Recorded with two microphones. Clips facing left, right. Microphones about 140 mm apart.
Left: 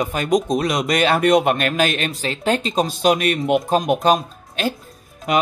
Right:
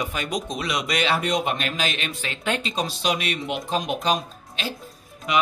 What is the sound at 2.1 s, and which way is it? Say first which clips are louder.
Speech: left 7 dB; 35° left (ahead or behind).